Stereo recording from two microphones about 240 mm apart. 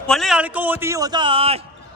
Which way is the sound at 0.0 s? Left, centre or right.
Centre.